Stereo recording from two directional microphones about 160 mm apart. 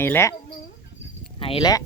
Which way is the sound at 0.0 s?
15° left (ahead or behind).